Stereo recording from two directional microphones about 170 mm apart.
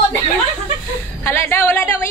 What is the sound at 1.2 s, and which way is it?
Speech, 15° left (ahead or behind).